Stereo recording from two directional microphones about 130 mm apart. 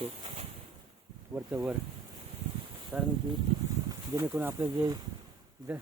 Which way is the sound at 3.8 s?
25° right (ahead or behind).